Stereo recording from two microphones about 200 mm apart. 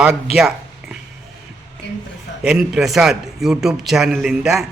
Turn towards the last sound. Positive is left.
turn(degrees=0)  # may be behind; listen again after turning